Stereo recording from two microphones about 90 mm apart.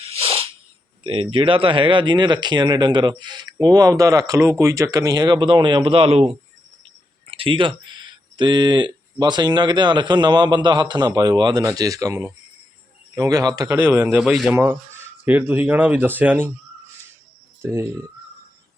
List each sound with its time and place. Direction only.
0.0 s sneeze: 90° right
1.0 s speech: 85° right
7.3 s a man's voice: 75° right (ahead or behind); by 13.7 s 45° right (ahead or behind)
13.9 s speech: 20° right (ahead or behind)
14.2 s a man's voice: 5° right (ahead or behind)
14.5 s speech: 25° right (ahead or behind)
17.6 s speech: 30° right (ahead or behind)